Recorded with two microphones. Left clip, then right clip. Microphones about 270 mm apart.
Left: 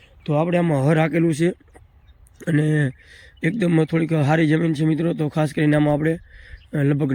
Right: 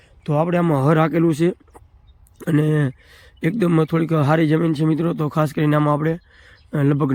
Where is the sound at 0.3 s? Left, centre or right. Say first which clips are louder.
Right 1 dB; centre.